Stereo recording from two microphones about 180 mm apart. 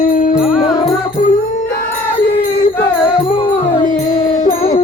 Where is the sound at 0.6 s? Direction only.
20° left (ahead or behind).